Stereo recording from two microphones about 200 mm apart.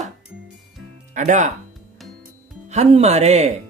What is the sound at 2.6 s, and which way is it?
Speech, 35° right (ahead or behind).